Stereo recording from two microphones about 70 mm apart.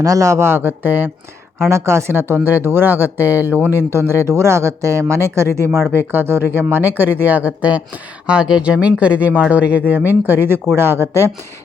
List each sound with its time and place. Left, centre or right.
0.0 s speech: right
1.6 s speech: right